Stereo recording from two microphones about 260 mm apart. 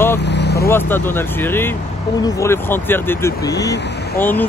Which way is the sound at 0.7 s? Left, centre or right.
Centre.